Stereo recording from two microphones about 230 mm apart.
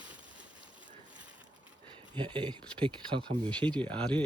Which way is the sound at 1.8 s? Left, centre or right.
Centre.